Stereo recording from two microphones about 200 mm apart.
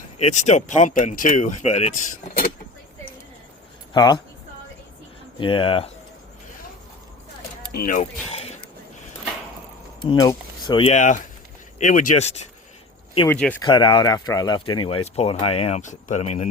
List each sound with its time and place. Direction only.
0.2 s speech: 35° left (ahead or behind)
3.9 s speech: 20° left (ahead or behind)
5.4 s speech: 25° left (ahead or behind)
7.7 s speech: 45° left (ahead or behind)
8.3 s a sound: 30° left (ahead or behind)
10.0 s speech: 20° left (ahead or behind)
13.2 s speech: 10° left (ahead or behind)
13.6 s speech: 25° left (ahead or behind)